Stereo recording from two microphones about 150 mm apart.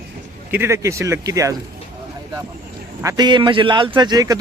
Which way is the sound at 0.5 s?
15° right (ahead or behind).